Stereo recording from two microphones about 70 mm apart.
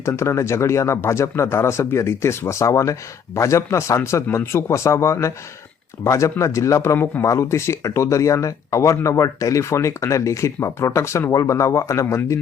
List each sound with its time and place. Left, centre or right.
0.0 s speech: left